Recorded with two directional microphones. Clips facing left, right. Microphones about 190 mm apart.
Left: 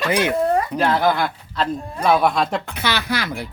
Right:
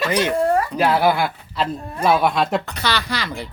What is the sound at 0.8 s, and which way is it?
A man's voice, 10° right (ahead or behind).